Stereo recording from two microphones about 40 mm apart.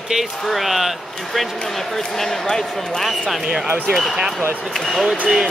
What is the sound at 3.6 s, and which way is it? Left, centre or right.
Speech, right.